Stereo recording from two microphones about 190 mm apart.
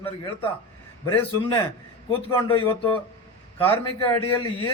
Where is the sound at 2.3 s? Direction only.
25° left (ahead or behind).